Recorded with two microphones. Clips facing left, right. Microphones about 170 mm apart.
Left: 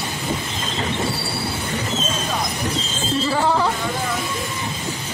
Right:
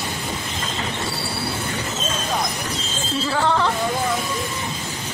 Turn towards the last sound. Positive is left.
turn(degrees=10)  # may be behind; listen again after turning